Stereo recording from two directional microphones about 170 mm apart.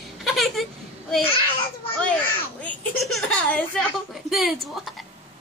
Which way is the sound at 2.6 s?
Centre (ahead or behind).